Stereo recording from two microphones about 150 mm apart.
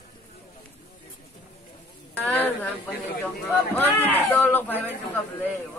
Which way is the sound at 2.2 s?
10° left (ahead or behind).